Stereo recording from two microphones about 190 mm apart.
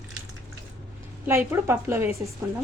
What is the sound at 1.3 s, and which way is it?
Speech, 10° right (ahead or behind).